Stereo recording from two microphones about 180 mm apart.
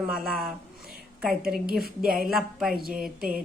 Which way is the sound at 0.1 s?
Centre (ahead or behind).